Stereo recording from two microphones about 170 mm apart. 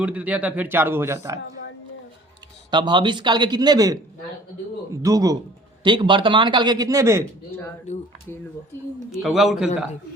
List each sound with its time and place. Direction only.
0.0 s a man's voice: 5° right (ahead or behind)
2.6 s a man's voice: 25° right (ahead or behind)
5.0 s a man's voice: 20° right (ahead or behind)
7.9 s speech: 45° left (ahead or behind)
9.1 s a man's voice: centre (ahead or behind)